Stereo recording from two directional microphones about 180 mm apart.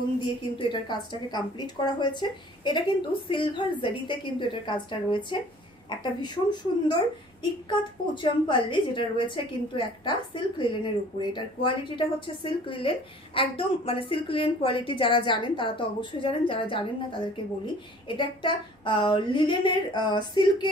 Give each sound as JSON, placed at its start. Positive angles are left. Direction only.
{"t": 0.6, "sound": "a woman's voice", "side_deg": 25}